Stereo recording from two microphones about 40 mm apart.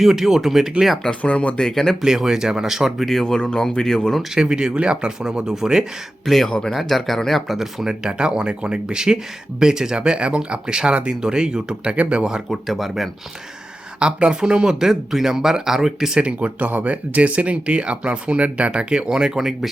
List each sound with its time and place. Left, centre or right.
0.0 s speech: centre
1.2 s speech: left
1.5 s speech: centre
2.0 s speech: centre
3.2 s speech: centre
4.4 s speech: centre
6.2 s speech: centre
6.5 s speech: centre
6.7 s speech: centre; by 11.9 s right
11.9 s speech: right
12.5 s speech: centre
14.0 s speech: right
16.2 s speech: right; by 19.5 s centre